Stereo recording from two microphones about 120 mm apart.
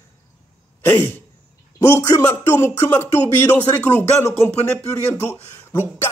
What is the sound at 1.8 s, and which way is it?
Speech, 25° left (ahead or behind).